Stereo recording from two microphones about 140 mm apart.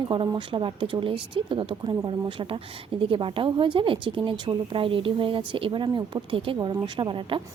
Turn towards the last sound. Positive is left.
turn(degrees=-35)  # may be behind; listen again after turning